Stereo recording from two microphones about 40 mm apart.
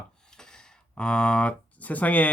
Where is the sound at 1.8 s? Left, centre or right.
Left.